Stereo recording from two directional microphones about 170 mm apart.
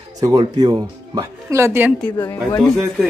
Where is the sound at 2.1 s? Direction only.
20° left (ahead or behind).